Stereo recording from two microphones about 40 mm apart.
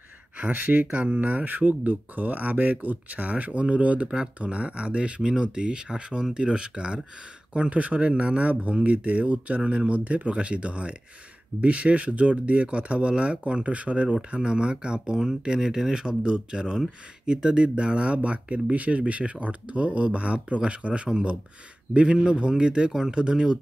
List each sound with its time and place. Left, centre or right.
0.4 s speech: right
7.7 s speech: right
14.3 s speech: right